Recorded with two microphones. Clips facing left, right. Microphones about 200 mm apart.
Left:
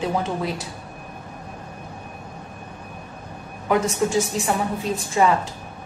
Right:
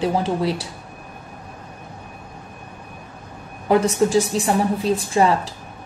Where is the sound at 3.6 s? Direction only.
35° right (ahead or behind).